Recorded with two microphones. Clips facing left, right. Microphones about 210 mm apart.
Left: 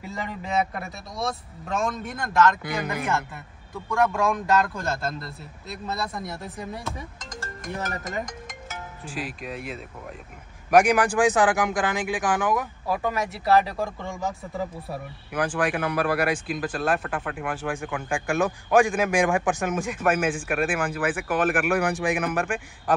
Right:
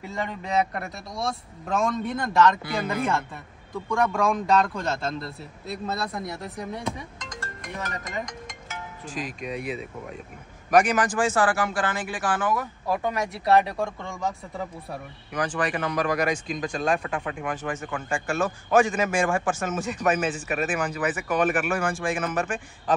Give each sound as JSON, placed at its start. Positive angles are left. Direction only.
{"t": 0.1, "sound": "speech", "side_deg": 0}
{"t": 2.6, "sound": "a man's voice", "side_deg": 15}
{"t": 3.7, "sound": "speech", "side_deg": 0}
{"t": 9.0, "sound": "speech", "side_deg": 5}
{"t": 10.7, "sound": "a man's voice", "side_deg": 10}
{"t": 12.8, "sound": "speech", "side_deg": 0}
{"t": 18.1, "sound": "a man's voice", "side_deg": 15}
{"t": 21.7, "sound": "a man's voice", "side_deg": 15}